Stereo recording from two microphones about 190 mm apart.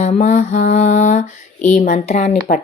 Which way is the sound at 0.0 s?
35° left (ahead or behind).